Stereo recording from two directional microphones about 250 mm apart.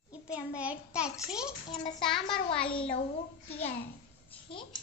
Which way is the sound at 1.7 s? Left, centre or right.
Centre.